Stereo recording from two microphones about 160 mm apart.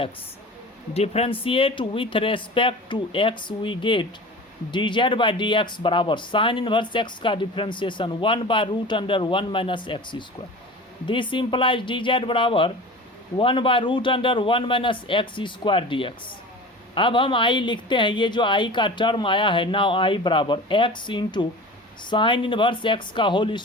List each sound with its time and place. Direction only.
0.9 s speech: 40° left (ahead or behind)